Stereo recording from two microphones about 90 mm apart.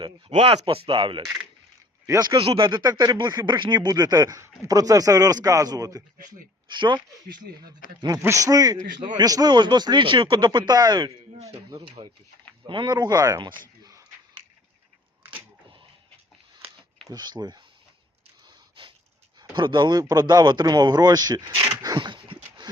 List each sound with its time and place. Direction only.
0.0 s speech: 80° right
2.0 s speech: 45° right (ahead or behind)
2.3 s speech: 65° right (ahead or behind)
2.8 s speech: 45° right (ahead or behind)
6.7 s speech: 60° right (ahead or behind)
8.2 s speech: 35° right (ahead or behind)
9.0 s speech: 65° right (ahead or behind)
9.2 s speech: 45° right (ahead or behind)
12.6 s speech: 60° right (ahead or behind)
17.1 s speech: 50° right (ahead or behind)
18.4 s a sound: 70° right (ahead or behind)
19.4 s speech: 60° right (ahead or behind)
20.0 s speech: 45° right (ahead or behind)
21.9 s a sound: 65° right (ahead or behind)